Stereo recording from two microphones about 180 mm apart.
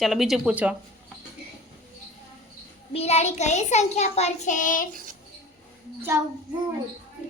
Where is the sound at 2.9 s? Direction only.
35° left (ahead or behind).